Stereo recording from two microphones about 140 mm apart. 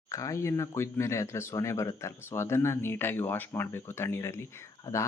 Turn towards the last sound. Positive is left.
turn(degrees=20)  # may be behind; listen again after turning